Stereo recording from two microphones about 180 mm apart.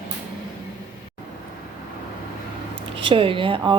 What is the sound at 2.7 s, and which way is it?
Speech, 30° right (ahead or behind).